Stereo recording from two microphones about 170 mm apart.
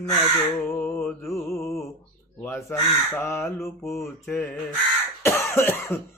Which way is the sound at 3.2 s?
15° left (ahead or behind).